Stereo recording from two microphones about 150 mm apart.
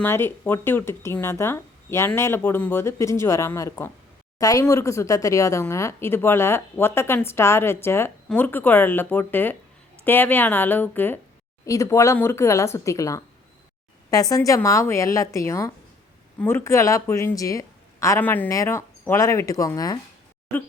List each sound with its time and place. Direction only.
0.0 s a woman's voice: 15° left (ahead or behind)